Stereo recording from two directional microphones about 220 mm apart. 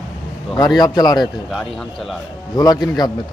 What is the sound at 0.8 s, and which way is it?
Speech, 20° left (ahead or behind).